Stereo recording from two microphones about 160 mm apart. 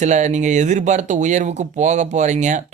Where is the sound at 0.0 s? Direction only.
50° right (ahead or behind).